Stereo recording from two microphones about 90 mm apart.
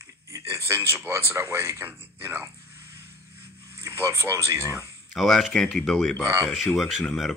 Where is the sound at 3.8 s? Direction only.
30° right (ahead or behind).